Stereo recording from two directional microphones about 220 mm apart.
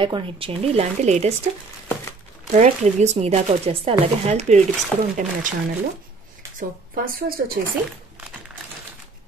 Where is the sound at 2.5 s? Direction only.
30° right (ahead or behind).